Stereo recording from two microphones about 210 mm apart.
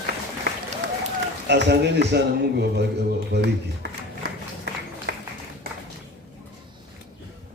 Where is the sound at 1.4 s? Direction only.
55° right (ahead or behind).